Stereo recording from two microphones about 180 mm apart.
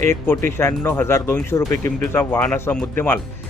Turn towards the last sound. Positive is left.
turn(degrees=10)  # may be behind; listen again after turning